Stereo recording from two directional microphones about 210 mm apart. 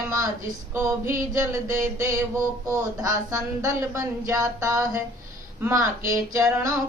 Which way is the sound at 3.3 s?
15° right (ahead or behind).